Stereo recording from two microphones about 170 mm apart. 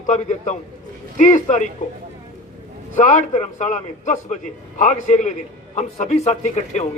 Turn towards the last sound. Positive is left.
turn(degrees=45)  # may be behind; listen again after turning